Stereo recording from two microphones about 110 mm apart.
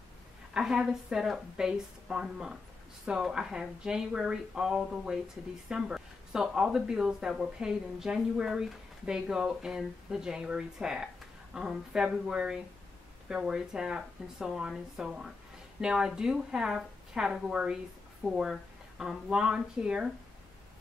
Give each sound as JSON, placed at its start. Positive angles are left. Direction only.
{"t": 0.6, "sound": "speech", "side_deg": -5}